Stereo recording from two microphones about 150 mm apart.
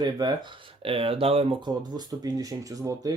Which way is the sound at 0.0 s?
25° right (ahead or behind).